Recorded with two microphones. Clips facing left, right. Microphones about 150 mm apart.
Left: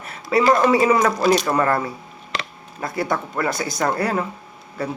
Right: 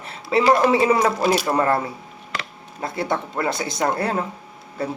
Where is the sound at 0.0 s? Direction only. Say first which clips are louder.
Left 1 dB; 25° right (ahead or behind).